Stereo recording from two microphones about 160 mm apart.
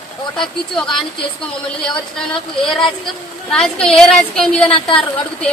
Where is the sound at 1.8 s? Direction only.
5° left (ahead or behind).